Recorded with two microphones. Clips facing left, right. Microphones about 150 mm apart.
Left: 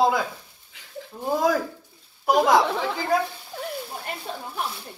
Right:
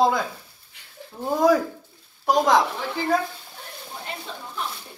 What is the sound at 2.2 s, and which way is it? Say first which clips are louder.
Speech: even; 5° left (ahead or behind).